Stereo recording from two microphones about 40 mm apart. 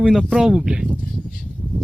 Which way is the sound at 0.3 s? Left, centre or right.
Centre.